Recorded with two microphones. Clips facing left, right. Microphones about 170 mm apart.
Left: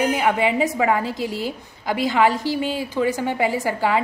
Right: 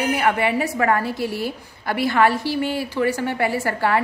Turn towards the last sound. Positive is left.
turn(degrees=15)  # may be behind; listen again after turning